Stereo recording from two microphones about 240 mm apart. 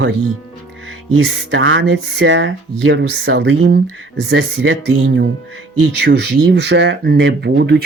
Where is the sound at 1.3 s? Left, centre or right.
Right.